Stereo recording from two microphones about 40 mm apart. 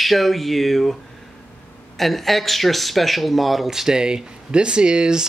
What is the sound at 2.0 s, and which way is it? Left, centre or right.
Speech, centre.